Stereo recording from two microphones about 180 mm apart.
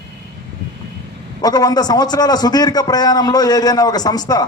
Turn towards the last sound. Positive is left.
turn(degrees=20)  # may be behind; listen again after turning